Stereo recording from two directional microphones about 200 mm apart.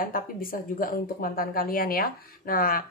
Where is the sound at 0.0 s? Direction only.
45° left (ahead or behind).